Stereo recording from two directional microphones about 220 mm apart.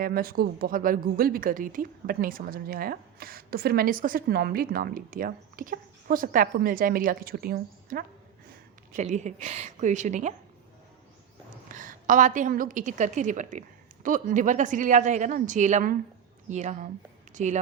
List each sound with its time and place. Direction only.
0.0 s a woman's voice: 40° right (ahead or behind)
11.7 s a woman's voice: 35° right (ahead or behind)